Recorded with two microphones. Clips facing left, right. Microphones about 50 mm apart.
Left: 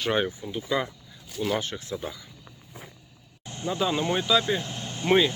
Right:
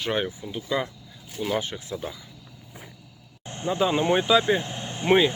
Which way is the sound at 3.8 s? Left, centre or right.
Right.